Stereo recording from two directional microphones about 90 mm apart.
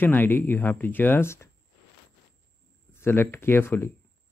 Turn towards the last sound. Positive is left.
turn(degrees=25)  # may be behind; listen again after turning